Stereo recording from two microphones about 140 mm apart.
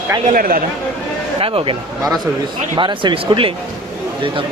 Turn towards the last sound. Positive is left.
turn(degrees=-35)  # may be behind; listen again after turning